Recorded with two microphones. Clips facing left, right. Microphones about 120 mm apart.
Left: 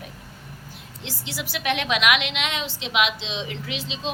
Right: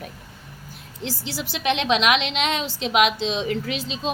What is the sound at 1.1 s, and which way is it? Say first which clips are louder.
A woman's voice: right 3 dB; 35° right (ahead or behind).